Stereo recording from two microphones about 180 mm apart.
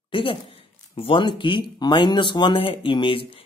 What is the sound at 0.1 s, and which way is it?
Speech, 25° left (ahead or behind).